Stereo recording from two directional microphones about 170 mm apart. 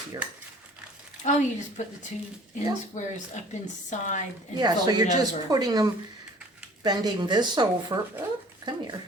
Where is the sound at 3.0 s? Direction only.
45° left (ahead or behind).